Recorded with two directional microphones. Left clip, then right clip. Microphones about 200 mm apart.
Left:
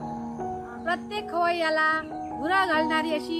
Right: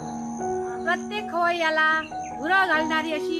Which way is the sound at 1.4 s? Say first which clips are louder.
Right 2 dB; 25° left (ahead or behind).